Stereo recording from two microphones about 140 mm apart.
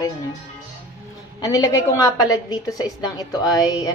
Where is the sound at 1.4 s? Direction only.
25° left (ahead or behind).